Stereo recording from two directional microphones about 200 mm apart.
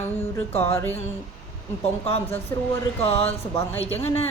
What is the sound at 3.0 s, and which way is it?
Speech, 30° left (ahead or behind).